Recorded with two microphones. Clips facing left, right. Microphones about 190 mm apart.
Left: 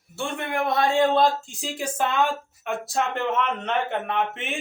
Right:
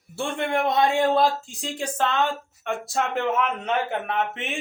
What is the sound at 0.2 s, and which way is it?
Speech, 25° right (ahead or behind).